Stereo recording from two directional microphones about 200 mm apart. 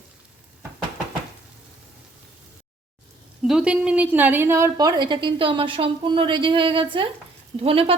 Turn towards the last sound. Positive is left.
turn(degrees=-25)  # may be behind; listen again after turning